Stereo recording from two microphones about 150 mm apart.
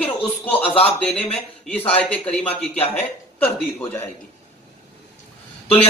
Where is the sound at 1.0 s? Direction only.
10° left (ahead or behind).